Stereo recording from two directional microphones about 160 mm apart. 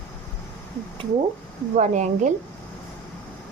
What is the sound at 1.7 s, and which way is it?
Speech, 50° right (ahead or behind).